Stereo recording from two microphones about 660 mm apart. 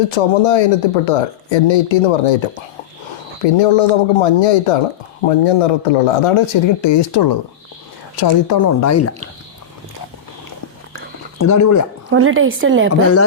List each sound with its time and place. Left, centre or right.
0.1 s speech: left
3.4 s speech: left
11.3 s speech: left
12.1 s speech: centre
12.9 s speech: left